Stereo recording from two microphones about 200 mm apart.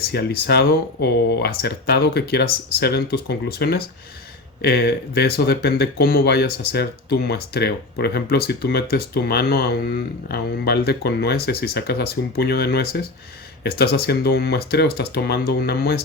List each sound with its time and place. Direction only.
0.1 s speech: 55° left (ahead or behind)